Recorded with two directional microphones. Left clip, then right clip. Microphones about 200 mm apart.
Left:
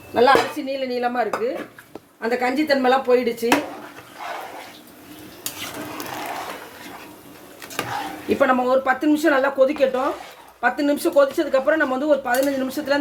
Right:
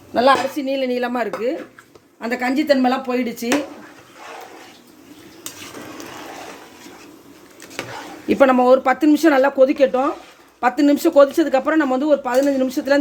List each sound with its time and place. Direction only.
0.1 s speech: 45° right (ahead or behind)
8.3 s speech: 50° right (ahead or behind)